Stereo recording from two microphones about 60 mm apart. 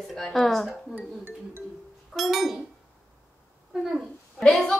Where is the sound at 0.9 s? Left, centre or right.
Right.